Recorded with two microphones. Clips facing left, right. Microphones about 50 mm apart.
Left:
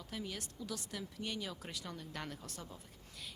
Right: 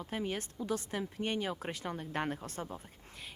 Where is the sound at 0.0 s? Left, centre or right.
Right.